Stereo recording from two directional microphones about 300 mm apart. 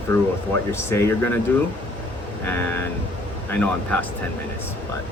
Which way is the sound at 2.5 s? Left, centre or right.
Centre.